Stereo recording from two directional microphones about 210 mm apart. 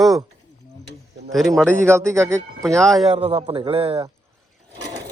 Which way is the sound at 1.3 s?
Centre (ahead or behind).